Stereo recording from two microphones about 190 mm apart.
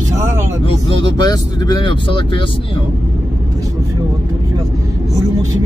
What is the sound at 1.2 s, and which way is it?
Speech, 20° left (ahead or behind).